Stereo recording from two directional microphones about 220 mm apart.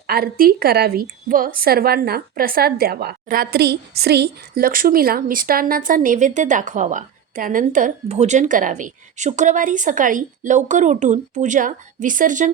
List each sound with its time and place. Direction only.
0.1 s a woman's voice: 45° right (ahead or behind)